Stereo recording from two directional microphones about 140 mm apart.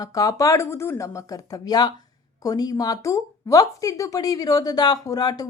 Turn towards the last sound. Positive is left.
turn(degrees=25)  # may be behind; listen again after turning